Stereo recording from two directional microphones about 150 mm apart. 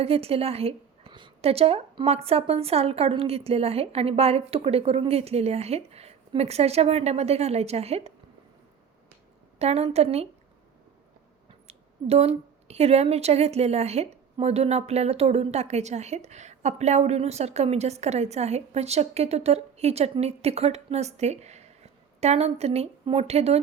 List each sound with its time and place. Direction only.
0.0 s a woman's voice: 40° right (ahead or behind)
9.6 s a woman's voice: 45° right (ahead or behind)
11.7 s a woman's voice: 45° right (ahead or behind)